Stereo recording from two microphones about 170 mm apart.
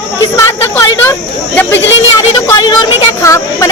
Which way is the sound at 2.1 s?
15° left (ahead or behind).